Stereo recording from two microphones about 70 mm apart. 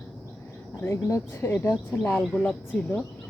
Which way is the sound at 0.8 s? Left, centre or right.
Left.